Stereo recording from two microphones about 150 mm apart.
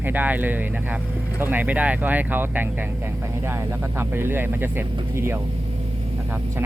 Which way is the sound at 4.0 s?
15° right (ahead or behind).